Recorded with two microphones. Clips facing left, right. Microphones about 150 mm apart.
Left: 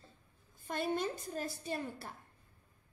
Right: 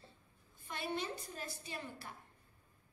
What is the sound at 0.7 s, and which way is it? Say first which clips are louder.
A woman's voice: left 5 dB; 45° left (ahead or behind).